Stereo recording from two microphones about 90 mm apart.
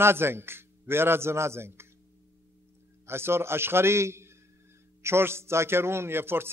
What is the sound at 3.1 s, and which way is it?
A man's voice, 25° right (ahead or behind).